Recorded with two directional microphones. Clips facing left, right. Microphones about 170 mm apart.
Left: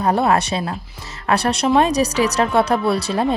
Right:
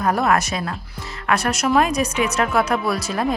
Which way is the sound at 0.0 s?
30° left (ahead or behind).